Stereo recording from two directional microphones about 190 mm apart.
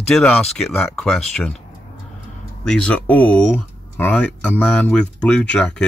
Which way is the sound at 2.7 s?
5° left (ahead or behind).